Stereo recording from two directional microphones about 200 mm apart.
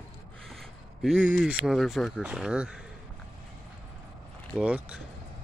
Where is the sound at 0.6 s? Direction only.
Centre (ahead or behind).